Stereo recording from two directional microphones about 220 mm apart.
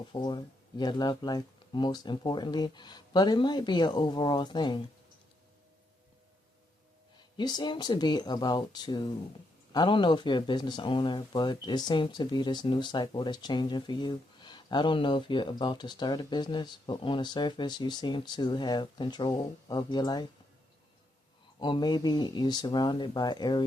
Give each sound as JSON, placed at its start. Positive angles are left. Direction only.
{"t": 0.1, "sound": "speech", "side_deg": 20}
{"t": 7.2, "sound": "speech", "side_deg": 20}
{"t": 21.6, "sound": "speech", "side_deg": 20}